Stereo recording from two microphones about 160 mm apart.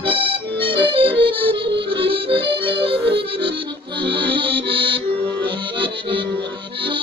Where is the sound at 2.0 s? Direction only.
35° right (ahead or behind).